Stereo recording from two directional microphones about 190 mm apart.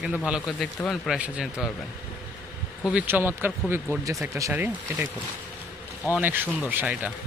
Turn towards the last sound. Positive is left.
turn(degrees=-10)  # may be behind; listen again after turning